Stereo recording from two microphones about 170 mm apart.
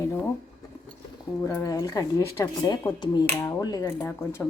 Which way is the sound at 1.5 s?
20° left (ahead or behind).